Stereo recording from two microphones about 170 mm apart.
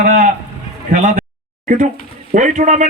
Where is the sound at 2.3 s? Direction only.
45° right (ahead or behind).